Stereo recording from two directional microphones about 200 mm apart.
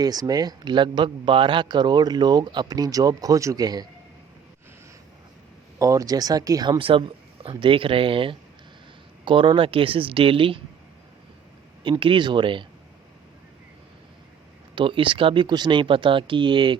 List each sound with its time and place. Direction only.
0.0 s speech: 20° right (ahead or behind)
5.8 s speech: 15° right (ahead or behind)
11.8 s speech: 25° right (ahead or behind)
14.8 s speech: 25° right (ahead or behind)